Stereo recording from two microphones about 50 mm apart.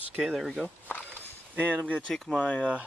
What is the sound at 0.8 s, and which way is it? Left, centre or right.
Walk, left.